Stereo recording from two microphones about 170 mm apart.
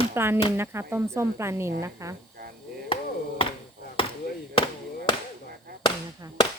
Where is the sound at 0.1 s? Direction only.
15° right (ahead or behind).